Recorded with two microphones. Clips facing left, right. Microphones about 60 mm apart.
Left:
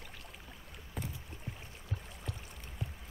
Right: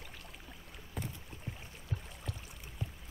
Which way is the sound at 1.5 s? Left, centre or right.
Centre.